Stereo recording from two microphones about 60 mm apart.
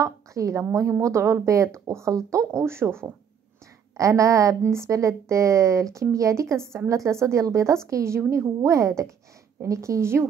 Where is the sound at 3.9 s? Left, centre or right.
Right.